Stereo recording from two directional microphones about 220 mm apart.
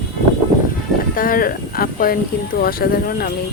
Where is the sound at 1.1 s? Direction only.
40° left (ahead or behind).